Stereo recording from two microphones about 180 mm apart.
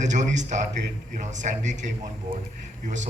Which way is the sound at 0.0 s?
40° right (ahead or behind).